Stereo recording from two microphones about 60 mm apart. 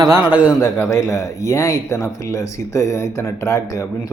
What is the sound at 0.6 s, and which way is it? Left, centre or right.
Speech, left.